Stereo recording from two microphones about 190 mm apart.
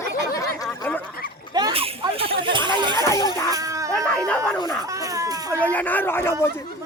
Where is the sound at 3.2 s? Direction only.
15° left (ahead or behind).